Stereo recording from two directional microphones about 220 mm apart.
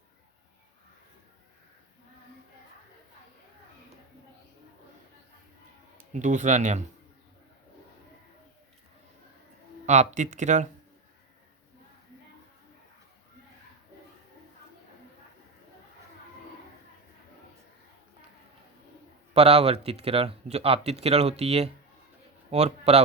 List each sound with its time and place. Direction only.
6.1 s speech: 35° right (ahead or behind)
9.8 s speech: 30° right (ahead or behind)
19.3 s speech: 25° right (ahead or behind)